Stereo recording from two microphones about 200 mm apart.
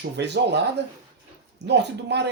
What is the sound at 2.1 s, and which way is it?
Speech, 60° right (ahead or behind).